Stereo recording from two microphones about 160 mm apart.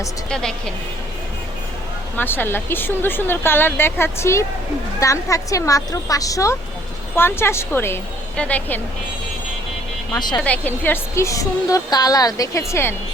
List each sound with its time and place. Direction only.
0.3 s a woman's voice: 5° left (ahead or behind)
2.1 s a woman's voice: 15° left (ahead or behind)
10.1 s a woman's voice: 25° left (ahead or behind)
10.4 s a woman's voice: 10° left (ahead or behind)